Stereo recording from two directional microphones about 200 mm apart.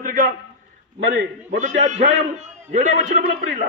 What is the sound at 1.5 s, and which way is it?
A man's voice, 35° right (ahead or behind).